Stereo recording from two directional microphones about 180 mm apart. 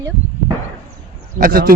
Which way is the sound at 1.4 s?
55° right (ahead or behind).